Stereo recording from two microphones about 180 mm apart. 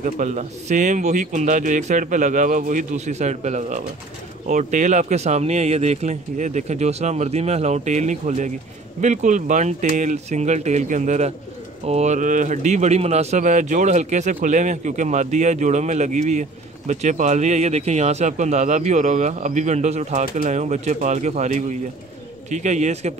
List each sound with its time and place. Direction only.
0.0 s a man's voice: 40° right (ahead or behind)